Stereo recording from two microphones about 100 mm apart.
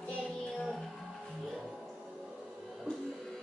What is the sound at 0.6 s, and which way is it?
Music, centre (ahead or behind).